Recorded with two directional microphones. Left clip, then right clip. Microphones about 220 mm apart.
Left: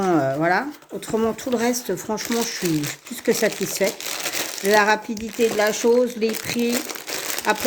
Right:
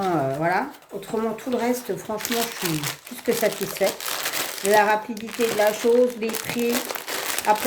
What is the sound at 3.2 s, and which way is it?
Speech, 45° left (ahead or behind).